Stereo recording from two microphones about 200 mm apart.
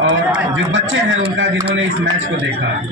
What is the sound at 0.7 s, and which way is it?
Speech, 70° right (ahead or behind).